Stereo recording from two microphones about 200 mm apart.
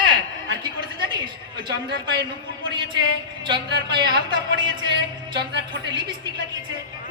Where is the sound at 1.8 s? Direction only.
60° right (ahead or behind).